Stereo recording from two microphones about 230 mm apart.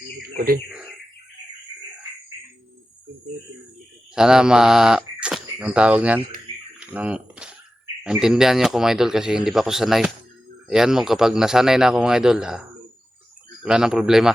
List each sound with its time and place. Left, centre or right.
0.3 s speech: right
4.1 s speech: centre
6.7 s a sound: centre
8.0 s speech: centre